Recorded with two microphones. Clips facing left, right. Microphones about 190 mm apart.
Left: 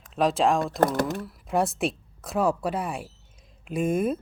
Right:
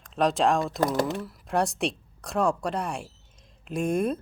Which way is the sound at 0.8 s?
55° left (ahead or behind).